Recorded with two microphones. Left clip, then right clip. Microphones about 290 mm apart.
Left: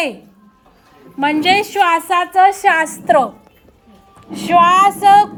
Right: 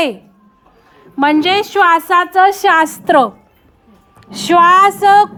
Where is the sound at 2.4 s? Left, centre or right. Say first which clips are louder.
Even; right.